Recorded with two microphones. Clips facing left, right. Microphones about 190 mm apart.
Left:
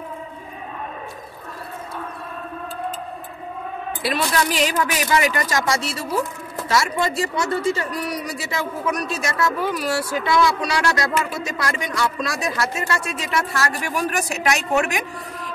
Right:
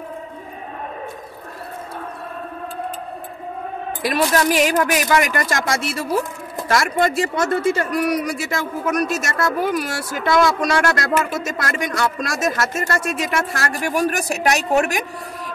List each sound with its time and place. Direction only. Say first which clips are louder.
4.0 s speech: right 4 dB; 45° right (ahead or behind)